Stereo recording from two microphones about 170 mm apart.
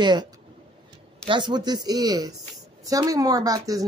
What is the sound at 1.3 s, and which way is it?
Speech, 25° right (ahead or behind).